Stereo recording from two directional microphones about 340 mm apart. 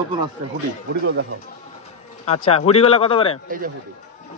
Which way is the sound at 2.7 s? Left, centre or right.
Centre.